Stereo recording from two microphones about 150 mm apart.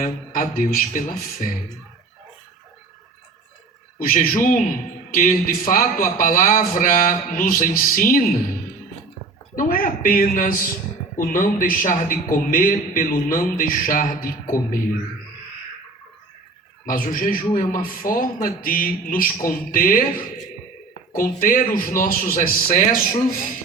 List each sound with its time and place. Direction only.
0.0 s a man's voice: 60° left (ahead or behind)
3.9 s a man's voice: 65° left (ahead or behind)
9.6 s a woman's voice: 70° left (ahead or behind)
16.8 s a man's voice: 65° left (ahead or behind)
21.1 s a man's voice: 65° left (ahead or behind)